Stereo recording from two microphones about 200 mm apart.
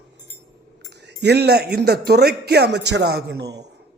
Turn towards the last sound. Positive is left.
turn(degrees=-55)  # may be behind; listen again after turning